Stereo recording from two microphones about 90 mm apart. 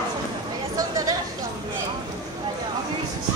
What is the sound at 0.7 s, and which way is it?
Chatter, 40° right (ahead or behind).